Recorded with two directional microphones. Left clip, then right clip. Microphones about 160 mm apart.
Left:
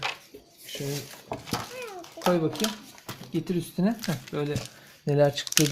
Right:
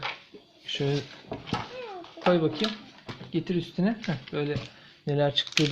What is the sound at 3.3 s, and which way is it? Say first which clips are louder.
Speech: even; 15° left (ahead or behind).